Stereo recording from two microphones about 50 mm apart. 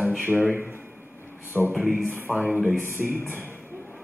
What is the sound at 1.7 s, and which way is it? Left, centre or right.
A man's voice, centre.